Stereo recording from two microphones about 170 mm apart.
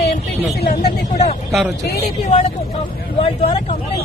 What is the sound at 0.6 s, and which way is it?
Speech, 60° left (ahead or behind).